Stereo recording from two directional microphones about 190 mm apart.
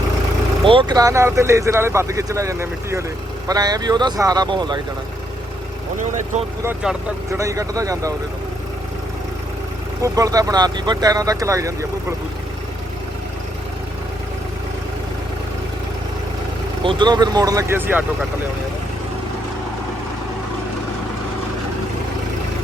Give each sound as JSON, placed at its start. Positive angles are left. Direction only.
{"t": 0.6, "sound": "a man's voice", "side_deg": -25}
{"t": 6.0, "sound": "speech", "side_deg": -40}
{"t": 6.7, "sound": "speech", "side_deg": -15}
{"t": 10.0, "sound": "speech", "side_deg": -20}
{"t": 16.8, "sound": "a man's voice", "side_deg": -25}